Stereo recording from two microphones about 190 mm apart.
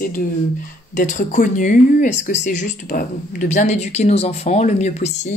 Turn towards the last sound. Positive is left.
turn(degrees=40)  # may be behind; listen again after turning